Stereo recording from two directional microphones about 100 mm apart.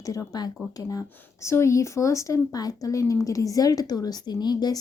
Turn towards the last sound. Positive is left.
turn(degrees=45)  # may be behind; listen again after turning